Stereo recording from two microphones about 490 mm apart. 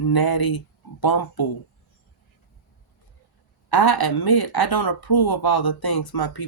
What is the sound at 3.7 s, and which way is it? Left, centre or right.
Speech, left.